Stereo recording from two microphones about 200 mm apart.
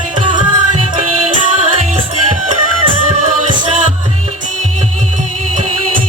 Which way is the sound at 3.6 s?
35° right (ahead or behind).